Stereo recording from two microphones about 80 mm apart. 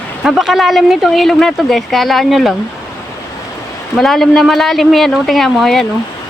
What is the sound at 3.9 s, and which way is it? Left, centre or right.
Speech, centre.